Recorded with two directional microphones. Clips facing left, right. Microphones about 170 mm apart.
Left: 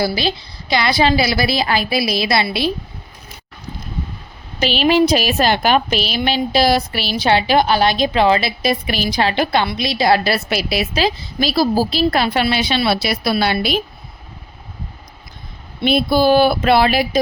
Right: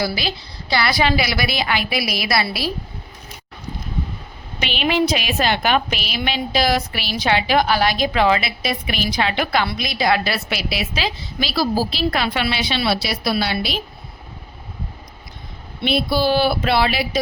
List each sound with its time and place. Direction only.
0.0 s a woman's voice: 25° left (ahead or behind)
4.6 s a woman's voice: 35° left (ahead or behind); by 13.7 s 55° left (ahead or behind)
15.8 s speech: 50° left (ahead or behind)